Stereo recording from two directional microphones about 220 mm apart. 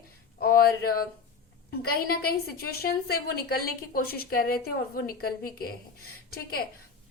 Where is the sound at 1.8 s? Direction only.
45° left (ahead or behind).